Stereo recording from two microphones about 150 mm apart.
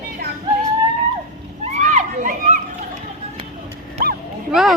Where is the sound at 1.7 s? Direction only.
55° right (ahead or behind).